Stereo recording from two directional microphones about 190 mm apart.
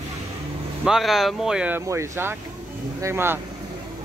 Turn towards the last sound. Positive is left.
turn(degrees=-10)  # may be behind; listen again after turning